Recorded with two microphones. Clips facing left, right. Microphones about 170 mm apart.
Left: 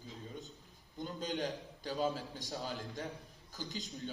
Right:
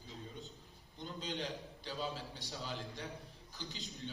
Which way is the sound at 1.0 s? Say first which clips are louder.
Left 4 dB; 45° left (ahead or behind).